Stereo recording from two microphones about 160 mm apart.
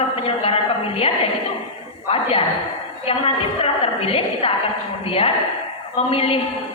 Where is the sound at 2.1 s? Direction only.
35° left (ahead or behind).